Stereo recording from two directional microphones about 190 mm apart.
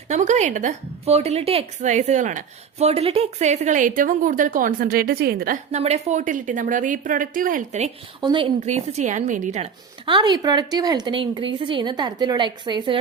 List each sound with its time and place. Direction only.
0.1 s a woman's voice: 40° right (ahead or behind)
5.7 s a woman's voice: 35° right (ahead or behind)
8.2 s a woman's voice: 25° right (ahead or behind)
8.6 s a woman's voice: 35° right (ahead or behind)
10.1 s a woman's voice: 25° right (ahead or behind)